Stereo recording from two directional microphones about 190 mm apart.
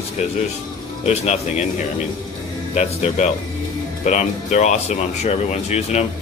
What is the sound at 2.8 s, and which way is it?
Speech, 35° left (ahead or behind).